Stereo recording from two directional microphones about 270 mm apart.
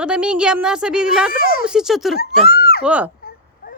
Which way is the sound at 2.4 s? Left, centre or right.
Left.